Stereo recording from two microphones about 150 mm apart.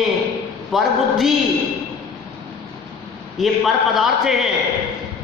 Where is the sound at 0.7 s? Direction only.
Centre (ahead or behind).